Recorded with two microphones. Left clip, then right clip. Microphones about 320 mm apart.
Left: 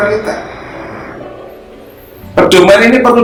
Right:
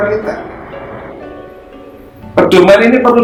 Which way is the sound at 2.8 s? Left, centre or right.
Centre.